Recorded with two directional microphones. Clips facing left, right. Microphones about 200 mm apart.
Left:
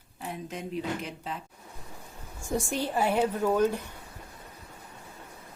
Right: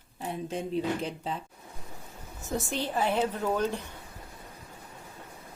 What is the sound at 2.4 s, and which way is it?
A woman's voice, 10° left (ahead or behind).